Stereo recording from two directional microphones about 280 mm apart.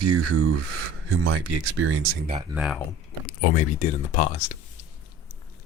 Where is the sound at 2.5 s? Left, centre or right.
Centre.